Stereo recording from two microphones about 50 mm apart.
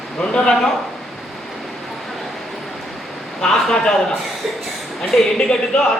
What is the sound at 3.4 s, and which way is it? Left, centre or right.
Speech, centre.